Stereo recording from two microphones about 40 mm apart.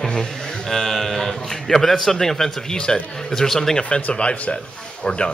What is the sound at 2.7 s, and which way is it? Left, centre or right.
Speech, centre.